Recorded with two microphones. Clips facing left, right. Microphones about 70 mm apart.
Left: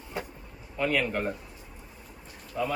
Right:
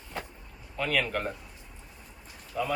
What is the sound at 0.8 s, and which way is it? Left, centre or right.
Speech, centre.